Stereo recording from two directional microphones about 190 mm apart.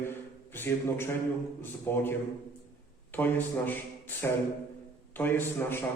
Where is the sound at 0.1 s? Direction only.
10° left (ahead or behind).